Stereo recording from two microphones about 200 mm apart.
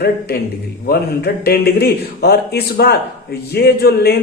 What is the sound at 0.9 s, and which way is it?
A man's voice, 50° left (ahead or behind).